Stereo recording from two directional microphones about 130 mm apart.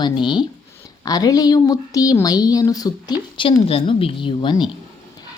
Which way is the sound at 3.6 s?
45° left (ahead or behind).